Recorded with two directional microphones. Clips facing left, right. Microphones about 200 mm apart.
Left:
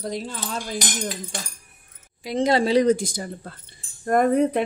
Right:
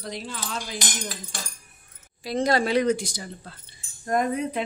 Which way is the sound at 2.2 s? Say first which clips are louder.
Left 3 dB; 20° left (ahead or behind).